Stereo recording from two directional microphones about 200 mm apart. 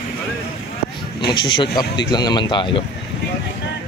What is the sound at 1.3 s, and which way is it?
Speech, 25° left (ahead or behind).